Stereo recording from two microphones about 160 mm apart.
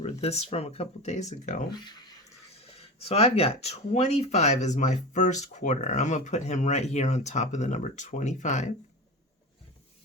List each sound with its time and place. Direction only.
0.0 s speech: 40° left (ahead or behind)
2.7 s speech: 40° left (ahead or behind)